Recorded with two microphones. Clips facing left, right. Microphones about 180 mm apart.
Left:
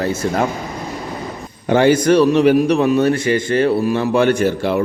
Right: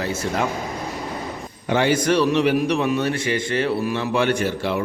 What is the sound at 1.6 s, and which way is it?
A man's voice, 45° left (ahead or behind).